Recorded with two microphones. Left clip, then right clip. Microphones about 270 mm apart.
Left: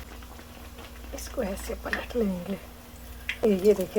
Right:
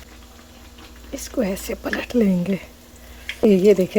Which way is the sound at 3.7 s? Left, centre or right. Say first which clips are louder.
Right 6 dB; right.